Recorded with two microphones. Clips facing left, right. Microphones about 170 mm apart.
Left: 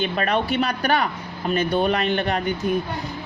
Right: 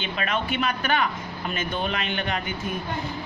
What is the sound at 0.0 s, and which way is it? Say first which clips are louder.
Speech: left 6 dB; 40° left (ahead or behind).